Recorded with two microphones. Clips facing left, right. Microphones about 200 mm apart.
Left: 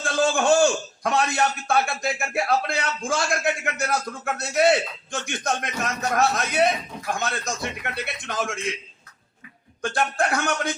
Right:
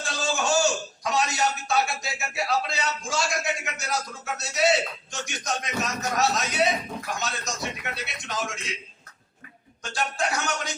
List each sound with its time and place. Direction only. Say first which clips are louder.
0.0 s a man's voice: left 7 dB; 55° left (ahead or behind)
9.8 s speech: left 5 dB; 55° left (ahead or behind)